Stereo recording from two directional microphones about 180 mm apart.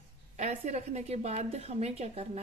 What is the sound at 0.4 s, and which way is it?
A woman's voice, 40° right (ahead or behind).